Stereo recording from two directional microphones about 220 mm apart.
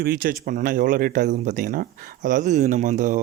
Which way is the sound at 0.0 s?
40° right (ahead or behind).